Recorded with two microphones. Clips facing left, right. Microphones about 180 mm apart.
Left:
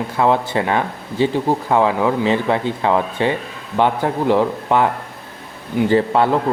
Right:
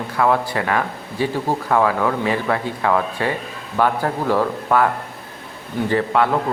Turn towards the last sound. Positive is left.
turn(degrees=30)  # may be behind; listen again after turning